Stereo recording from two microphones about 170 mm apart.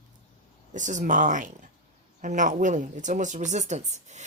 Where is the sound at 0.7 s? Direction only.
45° right (ahead or behind).